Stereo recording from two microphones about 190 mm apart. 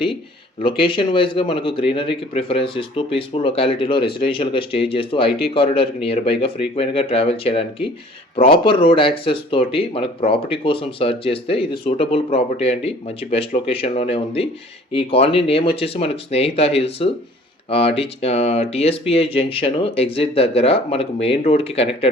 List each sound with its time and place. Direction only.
0.6 s speech: 25° left (ahead or behind)